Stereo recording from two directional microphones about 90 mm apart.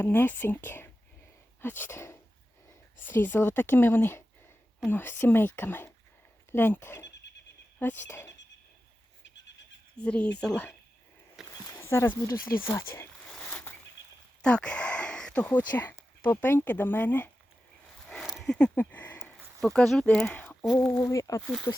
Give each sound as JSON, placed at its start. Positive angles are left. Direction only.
{"t": 0.0, "sound": "speech", "side_deg": 25}
{"t": 10.0, "sound": "speech", "side_deg": 10}
{"t": 11.6, "sound": "speech", "side_deg": 30}
{"t": 13.2, "sound": "a sound", "side_deg": 15}
{"t": 14.4, "sound": "speech", "side_deg": 10}
{"t": 18.4, "sound": "speech", "side_deg": 10}
{"t": 18.7, "sound": "a sound", "side_deg": 20}
{"t": 19.2, "sound": "a sound", "side_deg": 0}
{"t": 20.1, "sound": "speech", "side_deg": 15}
{"t": 21.1, "sound": "speech", "side_deg": 35}